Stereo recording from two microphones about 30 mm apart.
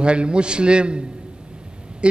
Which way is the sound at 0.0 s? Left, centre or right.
Right.